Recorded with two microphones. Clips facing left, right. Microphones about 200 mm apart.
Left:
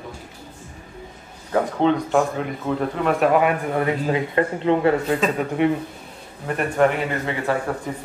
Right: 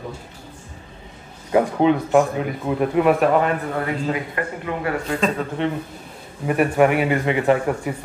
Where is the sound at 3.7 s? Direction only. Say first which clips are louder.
Left 2 dB; 25° left (ahead or behind).